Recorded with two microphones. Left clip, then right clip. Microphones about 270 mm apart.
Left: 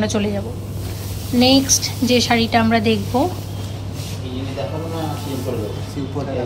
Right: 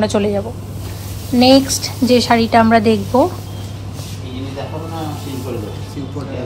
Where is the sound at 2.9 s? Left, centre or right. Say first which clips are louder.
Right 5 dB; right.